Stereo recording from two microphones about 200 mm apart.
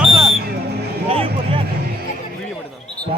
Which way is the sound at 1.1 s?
30° right (ahead or behind).